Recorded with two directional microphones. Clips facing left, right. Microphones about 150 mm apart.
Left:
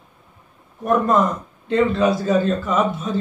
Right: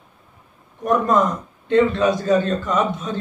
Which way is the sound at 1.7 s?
5° left (ahead or behind).